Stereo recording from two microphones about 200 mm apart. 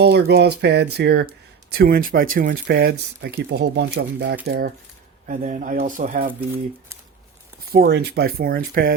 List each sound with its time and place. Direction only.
0.0 s speech: 55° right (ahead or behind)
7.7 s speech: 50° right (ahead or behind)